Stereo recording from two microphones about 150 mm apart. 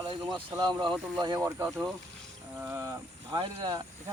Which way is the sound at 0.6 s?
30° right (ahead or behind).